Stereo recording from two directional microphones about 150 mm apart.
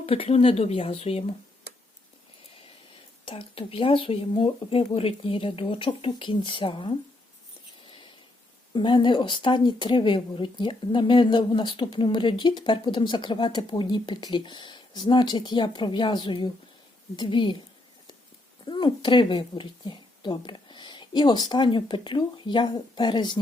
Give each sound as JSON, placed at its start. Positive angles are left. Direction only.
{"t": 0.0, "sound": "speech", "side_deg": 40}
{"t": 3.2, "sound": "speech", "side_deg": 35}
{"t": 8.7, "sound": "speech", "side_deg": 30}
{"t": 18.6, "sound": "a woman's voice", "side_deg": 30}